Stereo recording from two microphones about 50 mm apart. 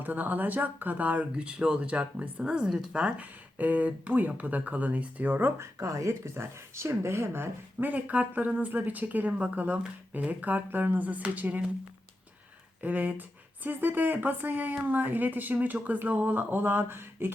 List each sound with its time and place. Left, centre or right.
0.0 s speech: right
2.4 s speech: centre; by 5.5 s right
5.5 s speech: right
7.8 s speech: right
12.8 s speech: right